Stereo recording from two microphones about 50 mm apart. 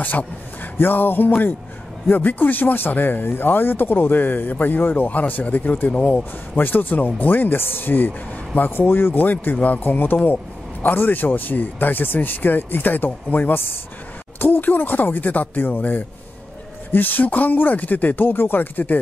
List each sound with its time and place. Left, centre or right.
0.7 s speech: left
5.9 s a man's voice: left
6.5 s speech: left